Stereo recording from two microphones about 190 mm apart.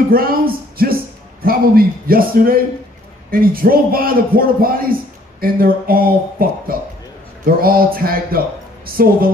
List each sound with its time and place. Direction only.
0.1 s a man's voice: 50° right (ahead or behind)